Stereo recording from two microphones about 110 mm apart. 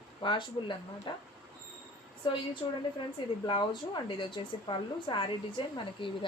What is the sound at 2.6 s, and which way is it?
Speech, 45° left (ahead or behind).